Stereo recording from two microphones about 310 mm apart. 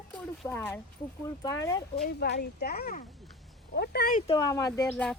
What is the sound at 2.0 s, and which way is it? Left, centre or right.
Speech, left.